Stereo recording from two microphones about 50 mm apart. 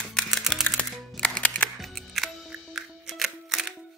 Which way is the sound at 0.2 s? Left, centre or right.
Centre.